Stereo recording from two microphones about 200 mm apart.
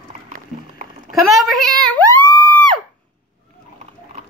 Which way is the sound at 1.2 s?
Centre (ahead or behind).